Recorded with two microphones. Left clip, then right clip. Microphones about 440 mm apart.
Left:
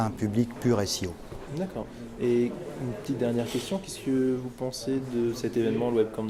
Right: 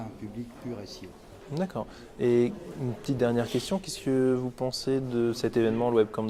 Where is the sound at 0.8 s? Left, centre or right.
Left.